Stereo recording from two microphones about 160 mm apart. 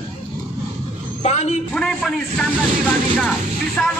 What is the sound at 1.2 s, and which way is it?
Speech, 45° left (ahead or behind).